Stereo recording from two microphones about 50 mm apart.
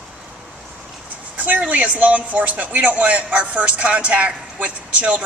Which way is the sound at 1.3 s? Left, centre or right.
Right.